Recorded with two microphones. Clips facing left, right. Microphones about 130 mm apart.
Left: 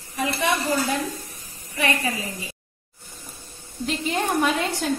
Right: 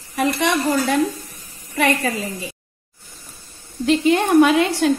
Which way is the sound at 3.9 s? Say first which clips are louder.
Right 10 dB; 85° right.